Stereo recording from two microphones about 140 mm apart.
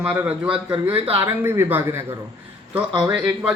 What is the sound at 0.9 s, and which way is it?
Speech, 40° right (ahead or behind).